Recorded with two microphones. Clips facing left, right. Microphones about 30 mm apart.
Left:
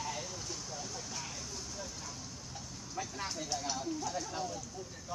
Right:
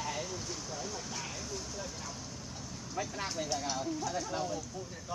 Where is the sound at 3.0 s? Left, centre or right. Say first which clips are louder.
Right 2 dB; centre.